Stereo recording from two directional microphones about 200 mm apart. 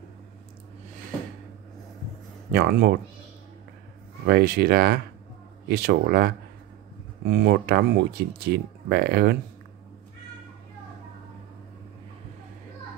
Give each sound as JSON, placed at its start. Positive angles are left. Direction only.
{"t": 2.5, "sound": "speech", "side_deg": -50}
{"t": 4.3, "sound": "speech", "side_deg": -55}